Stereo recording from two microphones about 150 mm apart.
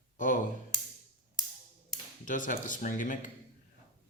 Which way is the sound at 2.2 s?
60° left (ahead or behind).